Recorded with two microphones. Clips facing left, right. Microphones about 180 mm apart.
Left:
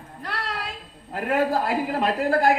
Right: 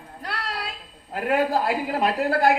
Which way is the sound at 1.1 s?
40° left (ahead or behind).